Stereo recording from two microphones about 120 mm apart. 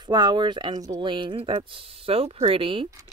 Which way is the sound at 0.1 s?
40° right (ahead or behind).